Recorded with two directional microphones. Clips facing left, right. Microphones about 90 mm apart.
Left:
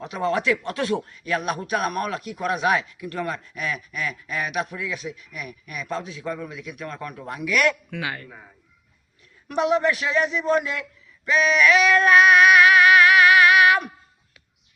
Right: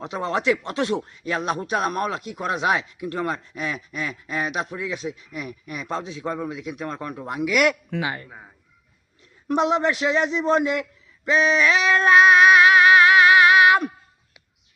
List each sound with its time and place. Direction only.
0.0 s speech: 30° right (ahead or behind)
9.5 s speech: 25° right (ahead or behind)
11.3 s a sound: 25° right (ahead or behind)